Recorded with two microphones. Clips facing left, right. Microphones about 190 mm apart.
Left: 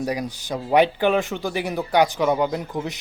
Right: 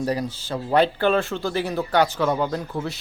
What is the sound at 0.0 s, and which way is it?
Speech, 15° left (ahead or behind).